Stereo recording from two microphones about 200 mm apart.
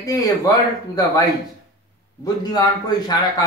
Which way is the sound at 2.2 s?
20° left (ahead or behind).